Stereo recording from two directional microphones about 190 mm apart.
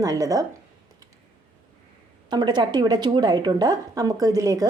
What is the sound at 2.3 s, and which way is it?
A woman's voice, 20° right (ahead or behind).